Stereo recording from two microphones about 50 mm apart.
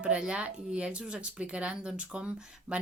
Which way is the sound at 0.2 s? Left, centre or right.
Right.